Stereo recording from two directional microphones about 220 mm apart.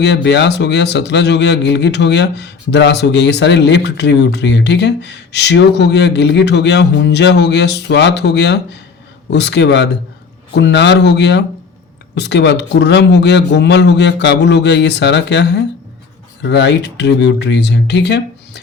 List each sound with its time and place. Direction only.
0.0 s a man's voice: 50° left (ahead or behind)